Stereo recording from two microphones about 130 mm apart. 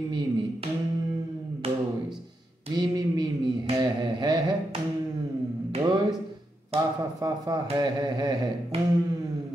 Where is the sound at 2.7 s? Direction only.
30° right (ahead or behind).